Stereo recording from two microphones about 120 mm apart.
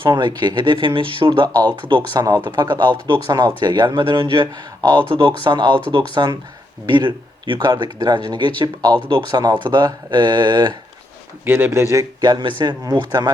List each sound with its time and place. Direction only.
0.0 s speech: 40° right (ahead or behind)
2.2 s speech: 30° right (ahead or behind)
9.4 s speech: 35° right (ahead or behind)
11.4 s speech: 20° right (ahead or behind)
12.2 s speech: 40° right (ahead or behind)